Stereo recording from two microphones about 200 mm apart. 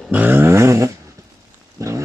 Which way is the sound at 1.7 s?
15° right (ahead or behind).